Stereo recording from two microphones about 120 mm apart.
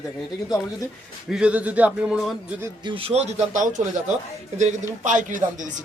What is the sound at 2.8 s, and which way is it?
A man's voice, 50° right (ahead or behind).